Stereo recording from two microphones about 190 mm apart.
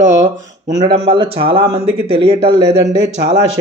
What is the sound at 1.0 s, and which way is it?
Speech, 30° right (ahead or behind).